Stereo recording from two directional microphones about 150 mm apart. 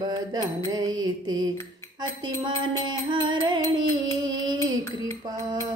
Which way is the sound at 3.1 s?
30° right (ahead or behind).